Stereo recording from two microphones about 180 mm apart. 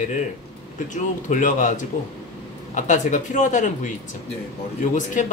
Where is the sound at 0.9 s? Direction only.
45° left (ahead or behind).